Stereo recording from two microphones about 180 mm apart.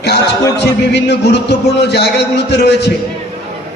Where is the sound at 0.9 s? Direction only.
70° left (ahead or behind).